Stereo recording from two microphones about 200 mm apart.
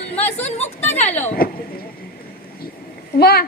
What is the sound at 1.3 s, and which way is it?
Vehicle, 50° left (ahead or behind).